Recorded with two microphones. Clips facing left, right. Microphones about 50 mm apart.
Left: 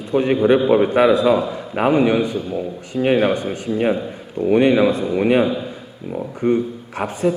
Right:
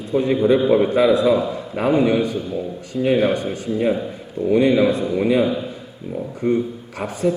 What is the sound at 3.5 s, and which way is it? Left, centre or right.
A man's voice, left.